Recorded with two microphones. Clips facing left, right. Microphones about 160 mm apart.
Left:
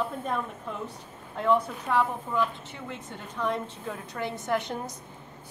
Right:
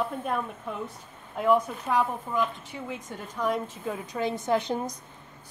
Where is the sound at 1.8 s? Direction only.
10° right (ahead or behind).